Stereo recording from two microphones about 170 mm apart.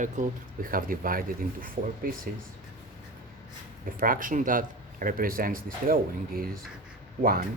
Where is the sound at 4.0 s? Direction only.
55° right (ahead or behind).